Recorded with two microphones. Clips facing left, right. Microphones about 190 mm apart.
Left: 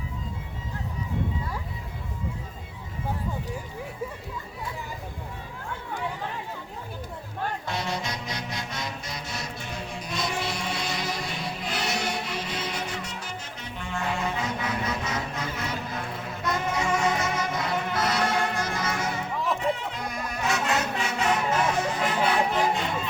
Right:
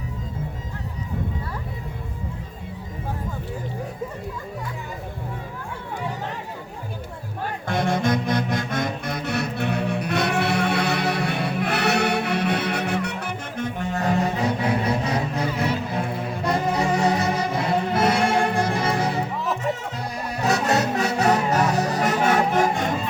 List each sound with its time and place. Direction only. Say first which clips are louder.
7.7 s music: right 9 dB; 55° right (ahead or behind)